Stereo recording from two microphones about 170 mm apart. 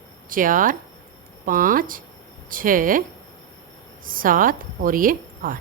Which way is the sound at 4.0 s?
55° right (ahead or behind).